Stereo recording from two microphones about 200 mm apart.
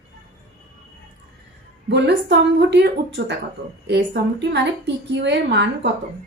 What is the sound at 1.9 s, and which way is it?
A woman's voice, 60° right (ahead or behind).